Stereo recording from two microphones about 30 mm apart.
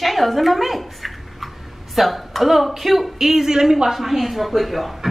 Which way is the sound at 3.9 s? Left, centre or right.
Centre.